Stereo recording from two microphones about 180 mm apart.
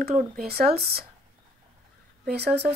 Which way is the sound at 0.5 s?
60° right (ahead or behind).